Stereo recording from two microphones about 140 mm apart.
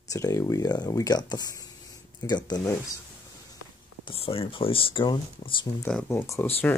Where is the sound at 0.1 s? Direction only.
20° left (ahead or behind).